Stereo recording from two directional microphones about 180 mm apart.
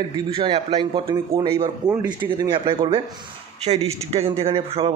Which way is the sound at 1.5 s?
15° right (ahead or behind).